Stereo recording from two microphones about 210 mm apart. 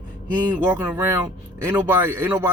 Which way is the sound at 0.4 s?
10° right (ahead or behind).